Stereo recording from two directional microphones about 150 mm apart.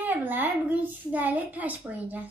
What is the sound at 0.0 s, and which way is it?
A child's voice, 10° right (ahead or behind).